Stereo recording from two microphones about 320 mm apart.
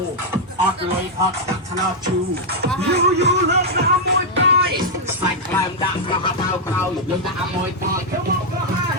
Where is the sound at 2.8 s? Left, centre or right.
Right.